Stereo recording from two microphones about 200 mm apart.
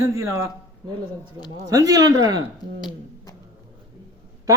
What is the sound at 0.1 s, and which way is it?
Speech, 15° right (ahead or behind).